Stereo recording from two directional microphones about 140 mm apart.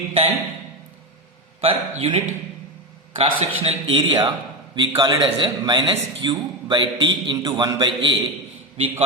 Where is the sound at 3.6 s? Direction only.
45° right (ahead or behind).